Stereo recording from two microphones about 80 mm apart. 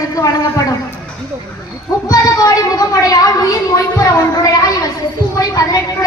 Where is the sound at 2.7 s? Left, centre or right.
Left.